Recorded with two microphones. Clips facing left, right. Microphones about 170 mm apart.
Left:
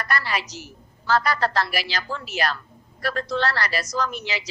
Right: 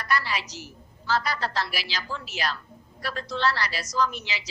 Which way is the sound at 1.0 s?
55° left (ahead or behind).